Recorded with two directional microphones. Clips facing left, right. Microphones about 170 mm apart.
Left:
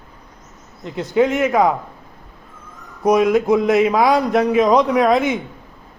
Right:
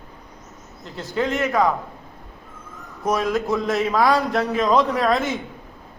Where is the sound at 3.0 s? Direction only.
15° left (ahead or behind).